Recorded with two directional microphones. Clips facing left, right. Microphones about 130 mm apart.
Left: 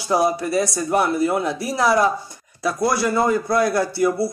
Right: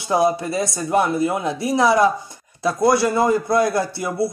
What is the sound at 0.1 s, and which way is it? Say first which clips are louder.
Speech: even; 25° right (ahead or behind).